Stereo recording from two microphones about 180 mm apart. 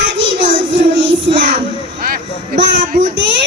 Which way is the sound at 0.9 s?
80° right.